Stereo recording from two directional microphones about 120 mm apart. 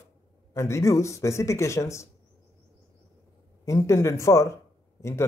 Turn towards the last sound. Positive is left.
turn(degrees=25)  # may be behind; listen again after turning